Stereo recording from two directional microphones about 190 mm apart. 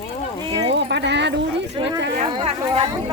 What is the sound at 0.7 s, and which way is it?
Speech, 65° right (ahead or behind).